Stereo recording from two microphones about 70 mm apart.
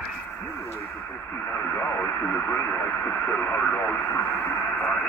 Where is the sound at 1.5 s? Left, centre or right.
Left.